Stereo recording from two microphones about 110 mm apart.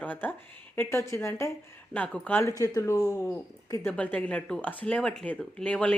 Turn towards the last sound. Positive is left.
turn(degrees=10)  # may be behind; listen again after turning